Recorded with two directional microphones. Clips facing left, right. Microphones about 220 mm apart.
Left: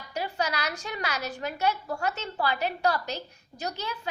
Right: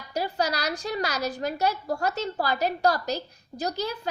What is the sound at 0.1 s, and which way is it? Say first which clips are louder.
A woman's voice: right 3 dB; 35° right (ahead or behind).